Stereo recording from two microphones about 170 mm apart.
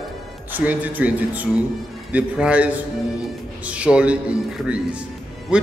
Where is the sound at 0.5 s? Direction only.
10° right (ahead or behind).